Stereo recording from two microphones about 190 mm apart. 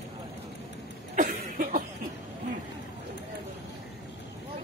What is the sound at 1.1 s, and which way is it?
Cough, 45° right (ahead or behind).